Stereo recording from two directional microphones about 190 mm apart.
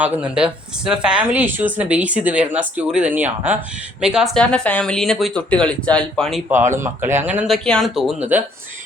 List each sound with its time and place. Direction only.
0.0 s speech: 5° right (ahead or behind)
6.5 s speech: 15° right (ahead or behind)